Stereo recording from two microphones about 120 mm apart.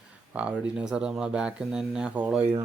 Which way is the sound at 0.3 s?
10° right (ahead or behind).